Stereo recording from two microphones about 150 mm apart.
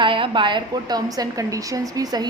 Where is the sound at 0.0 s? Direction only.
35° right (ahead or behind).